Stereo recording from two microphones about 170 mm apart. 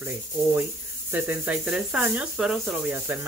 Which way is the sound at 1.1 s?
10° right (ahead or behind).